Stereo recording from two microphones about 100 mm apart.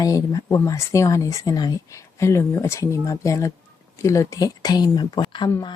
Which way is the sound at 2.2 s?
25° left (ahead or behind).